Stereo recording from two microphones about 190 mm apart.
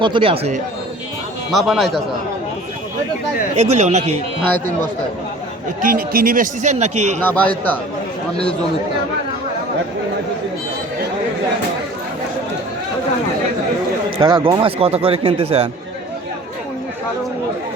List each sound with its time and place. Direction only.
0.0 s speech: 25° right (ahead or behind)
1.5 s a man's voice: centre (ahead or behind)
3.5 s a man's voice: 35° right (ahead or behind)
5.8 s a man's voice: 50° right (ahead or behind)
7.2 s speech: 10° left (ahead or behind)
14.2 s a man's voice: 25° right (ahead or behind)